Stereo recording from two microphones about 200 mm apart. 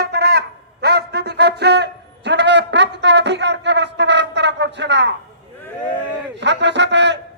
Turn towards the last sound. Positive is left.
turn(degrees=-60)  # may be behind; listen again after turning